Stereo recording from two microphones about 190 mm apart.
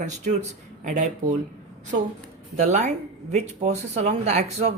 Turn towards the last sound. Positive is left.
turn(degrees=-35)  # may be behind; listen again after turning